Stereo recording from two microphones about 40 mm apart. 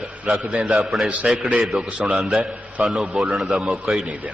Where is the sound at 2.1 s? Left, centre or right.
Centre.